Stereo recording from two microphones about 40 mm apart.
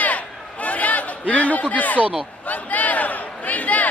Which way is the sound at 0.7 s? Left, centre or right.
Left.